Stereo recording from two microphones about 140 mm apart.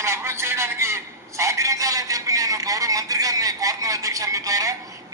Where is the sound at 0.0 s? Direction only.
20° right (ahead or behind).